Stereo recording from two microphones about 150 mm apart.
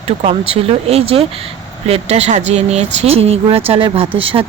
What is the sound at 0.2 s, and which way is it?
Speech, 45° right (ahead or behind).